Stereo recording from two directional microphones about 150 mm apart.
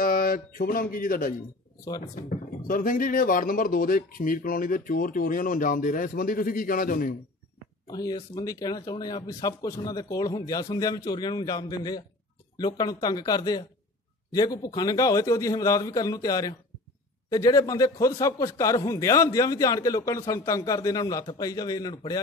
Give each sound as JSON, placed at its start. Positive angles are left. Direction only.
{"t": 0.0, "sound": "speech", "side_deg": 75}
{"t": 2.6, "sound": "speech", "side_deg": 70}
{"t": 7.9, "sound": "a man's voice", "side_deg": 25}